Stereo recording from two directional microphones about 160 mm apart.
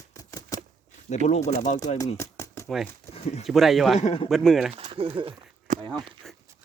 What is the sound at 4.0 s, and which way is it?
Speech, 45° left (ahead or behind).